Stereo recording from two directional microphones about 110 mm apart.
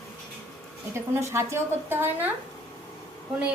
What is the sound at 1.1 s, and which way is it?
A woman's voice, 25° right (ahead or behind).